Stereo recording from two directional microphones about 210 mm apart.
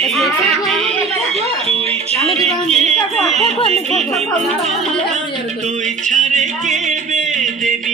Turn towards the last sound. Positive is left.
turn(degrees=-35)  # may be behind; listen again after turning